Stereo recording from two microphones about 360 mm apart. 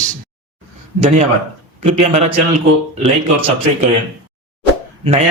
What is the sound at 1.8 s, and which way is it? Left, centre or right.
Speech, centre.